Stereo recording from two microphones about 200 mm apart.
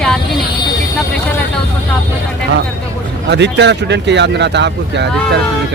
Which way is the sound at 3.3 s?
60° right (ahead or behind).